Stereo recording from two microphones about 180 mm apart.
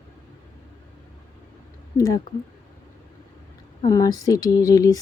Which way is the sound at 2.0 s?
20° left (ahead or behind).